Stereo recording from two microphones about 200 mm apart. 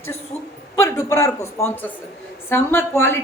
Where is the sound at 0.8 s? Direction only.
15° left (ahead or behind).